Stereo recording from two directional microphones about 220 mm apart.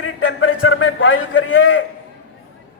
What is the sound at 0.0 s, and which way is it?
A man's voice, 65° left (ahead or behind).